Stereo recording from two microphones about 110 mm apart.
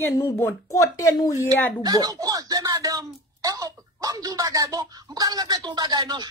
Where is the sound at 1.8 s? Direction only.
35° right (ahead or behind).